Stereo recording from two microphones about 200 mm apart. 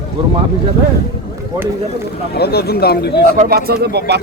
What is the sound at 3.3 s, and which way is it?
Speech, 45° right (ahead or behind).